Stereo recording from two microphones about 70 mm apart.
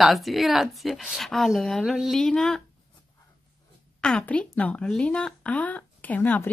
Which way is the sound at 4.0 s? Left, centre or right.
Centre.